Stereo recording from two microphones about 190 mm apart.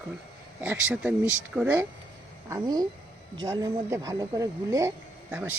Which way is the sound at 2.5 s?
20° right (ahead or behind).